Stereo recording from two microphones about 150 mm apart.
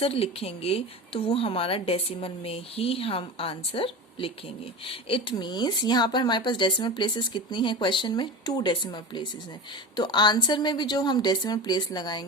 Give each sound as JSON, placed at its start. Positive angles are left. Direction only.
{"t": 0.0, "sound": "a woman's voice", "side_deg": 40}